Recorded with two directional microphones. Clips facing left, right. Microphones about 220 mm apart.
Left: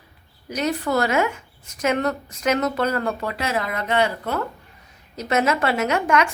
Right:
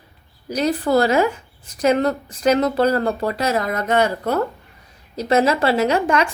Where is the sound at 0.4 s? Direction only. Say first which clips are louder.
Right 4 dB; 35° right (ahead or behind).